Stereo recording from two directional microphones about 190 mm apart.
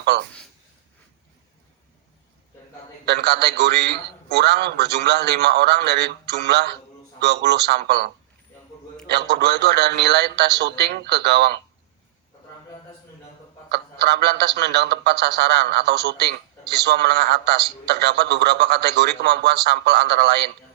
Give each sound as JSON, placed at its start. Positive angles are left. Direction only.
{"t": 0.1, "sound": "a man's voice", "side_deg": -65}
{"t": 3.1, "sound": "a man's voice", "side_deg": -60}
{"t": 13.7, "sound": "a man's voice", "side_deg": -60}